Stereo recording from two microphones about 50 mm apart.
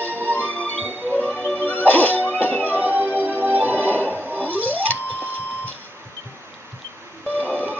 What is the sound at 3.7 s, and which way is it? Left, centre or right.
Music, left.